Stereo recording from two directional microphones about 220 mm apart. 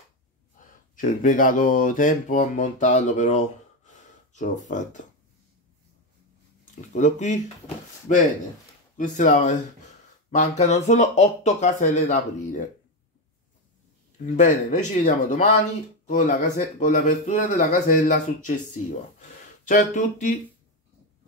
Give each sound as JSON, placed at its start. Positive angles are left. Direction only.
{"t": 0.6, "sound": "speech", "side_deg": 35}
{"t": 6.7, "sound": "speech", "side_deg": 35}
{"t": 14.2, "sound": "speech", "side_deg": 35}